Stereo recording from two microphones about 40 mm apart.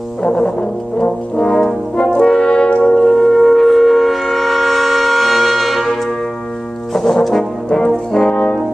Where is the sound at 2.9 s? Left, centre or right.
Centre.